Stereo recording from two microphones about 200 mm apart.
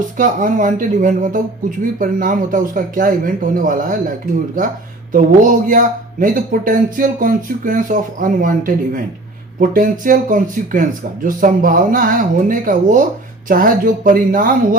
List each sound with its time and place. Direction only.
0.2 s speech: 40° right (ahead or behind)
5.1 s speech: 40° right (ahead or behind)